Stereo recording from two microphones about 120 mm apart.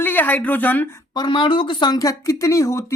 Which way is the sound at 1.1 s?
40° left (ahead or behind).